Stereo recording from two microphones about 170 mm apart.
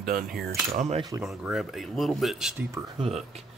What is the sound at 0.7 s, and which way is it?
Speech, 40° right (ahead or behind).